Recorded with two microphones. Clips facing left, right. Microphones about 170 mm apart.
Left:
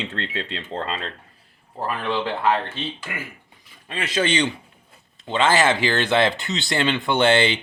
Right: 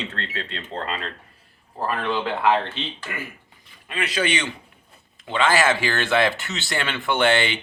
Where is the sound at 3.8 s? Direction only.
25° left (ahead or behind).